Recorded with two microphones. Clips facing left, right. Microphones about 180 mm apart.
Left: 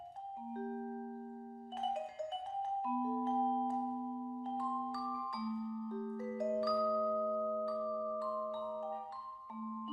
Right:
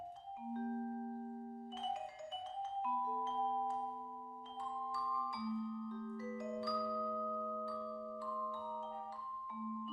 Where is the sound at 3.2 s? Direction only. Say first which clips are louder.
Left 5 dB; 50° left (ahead or behind).